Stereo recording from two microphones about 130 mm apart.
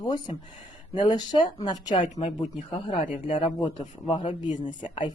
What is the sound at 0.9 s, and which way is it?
Speech, 35° left (ahead or behind).